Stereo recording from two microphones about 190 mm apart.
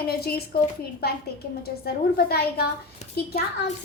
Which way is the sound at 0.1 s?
55° left (ahead or behind).